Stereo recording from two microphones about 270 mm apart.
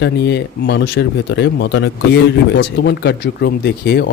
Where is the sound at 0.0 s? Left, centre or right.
Left.